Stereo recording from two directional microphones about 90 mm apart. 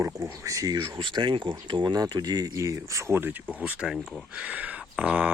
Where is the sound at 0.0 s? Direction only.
35° right (ahead or behind).